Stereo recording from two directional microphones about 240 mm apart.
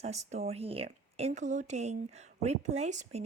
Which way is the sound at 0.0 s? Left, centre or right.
Right.